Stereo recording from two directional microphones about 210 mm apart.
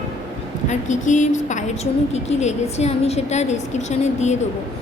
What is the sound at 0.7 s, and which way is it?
Speech, 35° left (ahead or behind).